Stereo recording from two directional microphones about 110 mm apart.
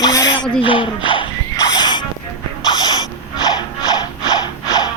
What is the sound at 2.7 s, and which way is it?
Snort, 40° left (ahead or behind).